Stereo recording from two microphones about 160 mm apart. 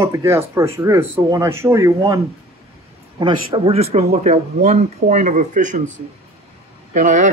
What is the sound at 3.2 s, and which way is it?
Speech, 30° right (ahead or behind).